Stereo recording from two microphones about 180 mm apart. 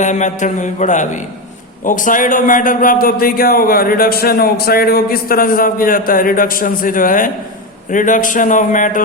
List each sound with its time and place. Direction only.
0.0 s a man's voice: 40° left (ahead or behind)